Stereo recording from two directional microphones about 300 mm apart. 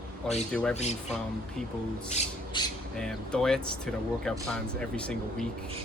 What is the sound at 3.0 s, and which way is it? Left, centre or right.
Speech, centre.